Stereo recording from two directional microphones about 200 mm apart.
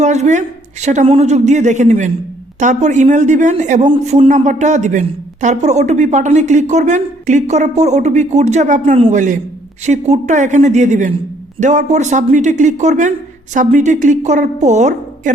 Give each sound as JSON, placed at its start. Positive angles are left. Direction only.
{"t": 0.0, "sound": "speech", "side_deg": -35}